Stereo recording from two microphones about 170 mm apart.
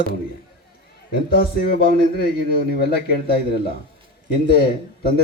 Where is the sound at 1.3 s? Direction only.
65° left (ahead or behind).